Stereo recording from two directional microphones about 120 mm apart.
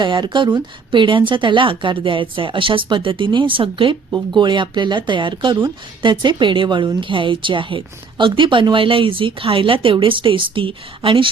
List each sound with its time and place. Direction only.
0.0 s speech: 40° right (ahead or behind)